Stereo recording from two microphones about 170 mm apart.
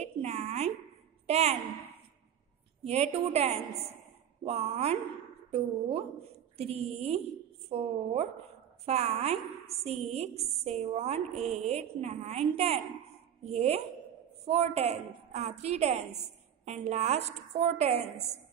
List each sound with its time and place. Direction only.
0.0 s a sound: 40° right (ahead or behind)
1.2 s a woman's voice: 40° right (ahead or behind)
2.8 s a woman's voice: 40° right (ahead or behind)